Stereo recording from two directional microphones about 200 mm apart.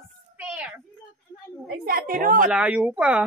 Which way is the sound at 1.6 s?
45° right (ahead or behind).